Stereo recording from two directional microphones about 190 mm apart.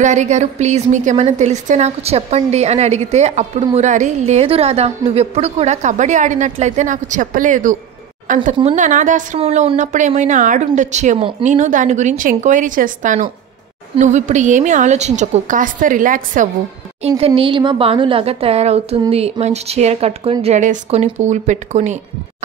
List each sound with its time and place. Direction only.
0.0 s a woman's voice: 40° right (ahead or behind)
17.2 s a woman's voice: 25° right (ahead or behind)